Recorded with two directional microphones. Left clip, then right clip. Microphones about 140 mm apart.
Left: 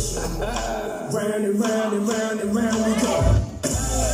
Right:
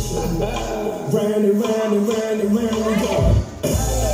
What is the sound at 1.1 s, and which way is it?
Music, 20° right (ahead or behind).